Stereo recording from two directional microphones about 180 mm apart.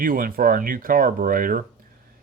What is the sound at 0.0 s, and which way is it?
Speech, 50° right (ahead or behind).